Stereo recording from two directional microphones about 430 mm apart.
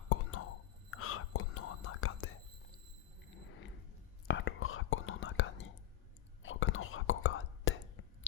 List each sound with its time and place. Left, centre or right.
0.1 s whispering: left
4.3 s whispering: left